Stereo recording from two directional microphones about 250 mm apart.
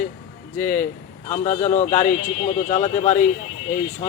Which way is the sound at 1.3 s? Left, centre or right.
Left.